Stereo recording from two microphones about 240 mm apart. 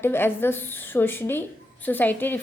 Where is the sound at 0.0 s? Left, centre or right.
Centre.